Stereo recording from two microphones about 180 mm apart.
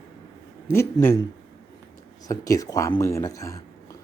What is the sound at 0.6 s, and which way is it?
Speech, 15° left (ahead or behind).